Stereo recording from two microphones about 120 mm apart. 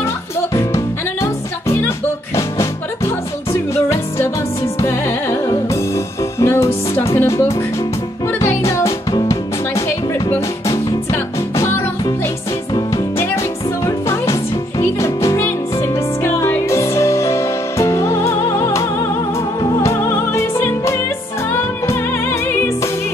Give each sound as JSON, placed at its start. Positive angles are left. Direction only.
{"t": 0.6, "sound": "music", "side_deg": 25}
{"t": 3.7, "sound": "music", "side_deg": 20}
{"t": 6.4, "sound": "music", "side_deg": 20}
{"t": 13.8, "sound": "music", "side_deg": 25}